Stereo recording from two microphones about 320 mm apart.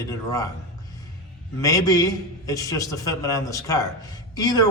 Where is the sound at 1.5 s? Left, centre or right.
Centre.